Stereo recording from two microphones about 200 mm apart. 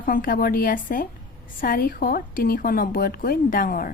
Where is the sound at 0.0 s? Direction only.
45° left (ahead or behind).